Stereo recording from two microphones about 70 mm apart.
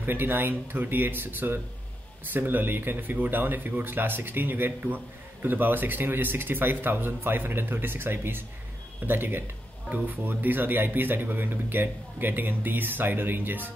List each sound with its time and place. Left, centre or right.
0.0 s speech: right